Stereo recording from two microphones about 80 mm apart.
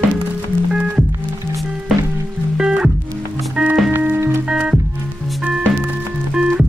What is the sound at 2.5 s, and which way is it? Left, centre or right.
Music, centre.